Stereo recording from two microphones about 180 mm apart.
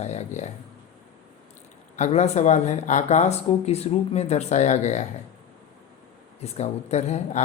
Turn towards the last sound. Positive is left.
turn(degrees=40)  # may be behind; listen again after turning